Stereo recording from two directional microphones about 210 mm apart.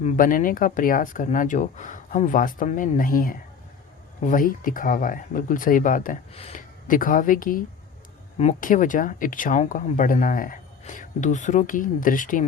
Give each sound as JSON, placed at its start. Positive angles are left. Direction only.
{"t": 0.0, "sound": "speech", "side_deg": 35}